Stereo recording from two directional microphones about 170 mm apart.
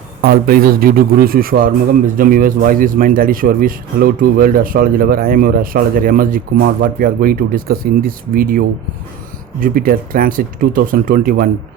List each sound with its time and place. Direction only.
0.2 s a man's voice: 60° right (ahead or behind)